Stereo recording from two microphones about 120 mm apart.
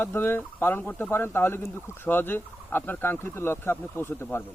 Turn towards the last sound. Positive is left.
turn(degrees=15)  # may be behind; listen again after turning